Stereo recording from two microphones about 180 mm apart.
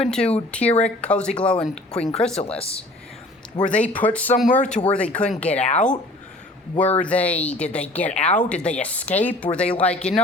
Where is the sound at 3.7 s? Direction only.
10° left (ahead or behind).